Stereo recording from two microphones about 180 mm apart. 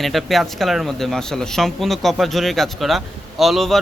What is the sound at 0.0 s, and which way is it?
Speech, centre (ahead or behind).